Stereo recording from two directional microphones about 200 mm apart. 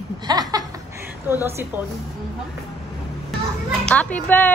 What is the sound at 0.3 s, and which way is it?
Laughter, 20° right (ahead or behind).